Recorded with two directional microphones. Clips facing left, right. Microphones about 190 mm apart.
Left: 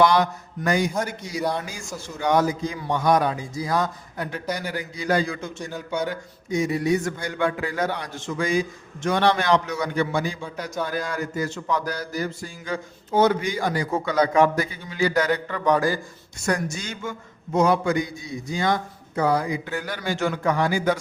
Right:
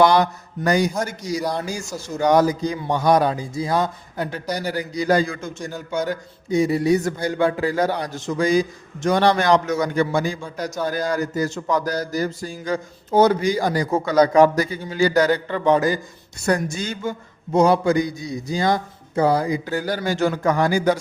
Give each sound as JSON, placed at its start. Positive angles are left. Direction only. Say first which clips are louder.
{"t": 0.0, "sound": "a man's voice", "louder": "right 3 dB", "side_deg": -35}
{"t": 16.7, "sound": "speech", "louder": "right 5 dB", "side_deg": -35}